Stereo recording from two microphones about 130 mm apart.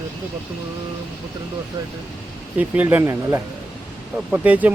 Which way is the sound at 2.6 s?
15° right (ahead or behind).